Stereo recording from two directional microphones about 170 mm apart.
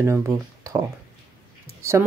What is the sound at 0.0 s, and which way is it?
Speech, 15° right (ahead or behind).